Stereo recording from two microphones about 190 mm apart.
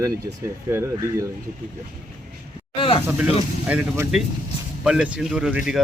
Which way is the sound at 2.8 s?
30° left (ahead or behind).